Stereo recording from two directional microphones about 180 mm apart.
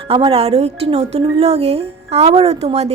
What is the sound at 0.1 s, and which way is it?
A woman's voice, 30° right (ahead or behind).